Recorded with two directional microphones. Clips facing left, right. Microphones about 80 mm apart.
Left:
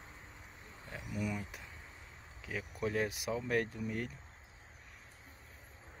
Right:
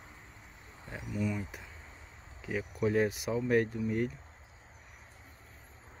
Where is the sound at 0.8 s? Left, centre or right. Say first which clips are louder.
Right 3 dB; centre.